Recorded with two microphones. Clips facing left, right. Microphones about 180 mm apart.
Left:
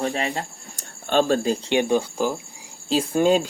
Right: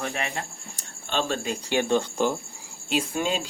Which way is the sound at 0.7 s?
45° left (ahead or behind).